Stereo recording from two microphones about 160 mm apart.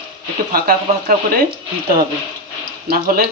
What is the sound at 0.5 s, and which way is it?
Speech, 65° right (ahead or behind).